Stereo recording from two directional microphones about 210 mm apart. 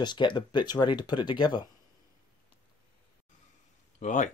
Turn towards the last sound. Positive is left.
turn(degrees=35)  # may be behind; listen again after turning